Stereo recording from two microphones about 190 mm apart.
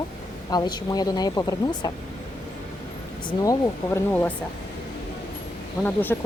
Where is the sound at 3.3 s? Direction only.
10° left (ahead or behind).